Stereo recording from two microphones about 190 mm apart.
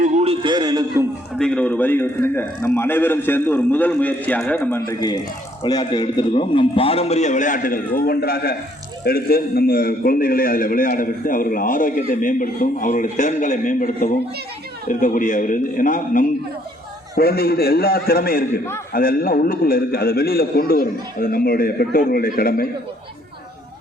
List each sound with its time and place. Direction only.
0.0 s a sound: 35° right (ahead or behind); by 1.0 s 20° right (ahead or behind)
1.4 s a man's voice: 5° left (ahead or behind)
4.9 s a man's voice: 20° left (ahead or behind); by 22.7 s 50° left (ahead or behind)